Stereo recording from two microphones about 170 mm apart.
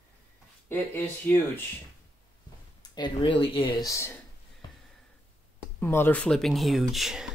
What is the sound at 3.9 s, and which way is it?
Speech, 15° left (ahead or behind).